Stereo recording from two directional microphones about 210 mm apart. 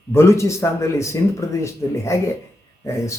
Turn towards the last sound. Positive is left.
turn(degrees=15)  # may be behind; listen again after turning